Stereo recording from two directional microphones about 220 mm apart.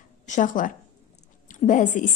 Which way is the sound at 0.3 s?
35° left (ahead or behind).